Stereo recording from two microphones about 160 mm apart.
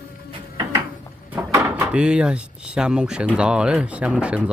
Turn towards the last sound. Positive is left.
turn(degrees=-5)  # may be behind; listen again after turning